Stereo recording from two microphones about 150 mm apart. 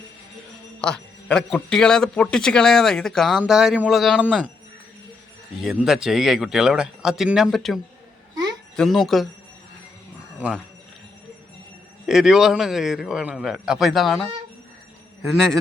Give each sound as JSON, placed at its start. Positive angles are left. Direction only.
{"t": 0.8, "sound": "a man's voice", "side_deg": 5}
{"t": 5.5, "sound": "a man's voice", "side_deg": 0}
{"t": 12.0, "sound": "a man's voice", "side_deg": -5}